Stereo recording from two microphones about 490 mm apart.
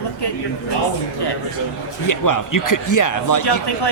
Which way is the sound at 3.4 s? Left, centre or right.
Left.